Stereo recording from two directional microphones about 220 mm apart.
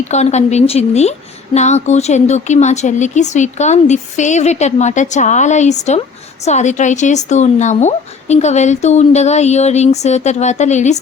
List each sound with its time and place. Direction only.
0.1 s speech: 30° left (ahead or behind)